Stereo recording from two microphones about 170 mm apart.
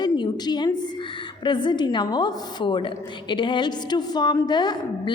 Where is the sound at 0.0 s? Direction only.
25° left (ahead or behind).